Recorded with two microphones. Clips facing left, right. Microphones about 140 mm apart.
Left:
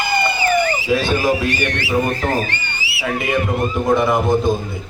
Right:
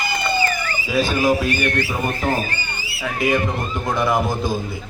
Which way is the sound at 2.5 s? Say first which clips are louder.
Left 2 dB; 80° left.